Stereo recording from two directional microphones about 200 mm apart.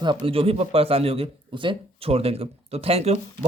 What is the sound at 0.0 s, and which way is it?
Speech, 25° right (ahead or behind).